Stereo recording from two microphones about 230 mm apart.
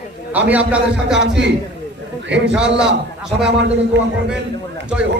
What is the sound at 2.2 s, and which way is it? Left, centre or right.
Speech, right.